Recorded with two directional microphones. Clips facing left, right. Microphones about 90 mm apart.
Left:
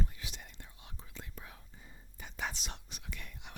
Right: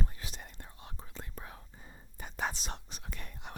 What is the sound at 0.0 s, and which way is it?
Whispering, 40° right (ahead or behind).